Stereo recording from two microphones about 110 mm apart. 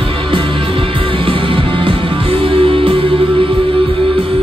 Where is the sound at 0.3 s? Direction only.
55° right (ahead or behind).